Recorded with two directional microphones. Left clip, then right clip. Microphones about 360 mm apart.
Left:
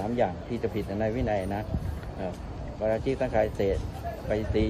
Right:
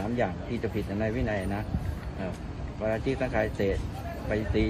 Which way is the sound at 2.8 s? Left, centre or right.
Centre.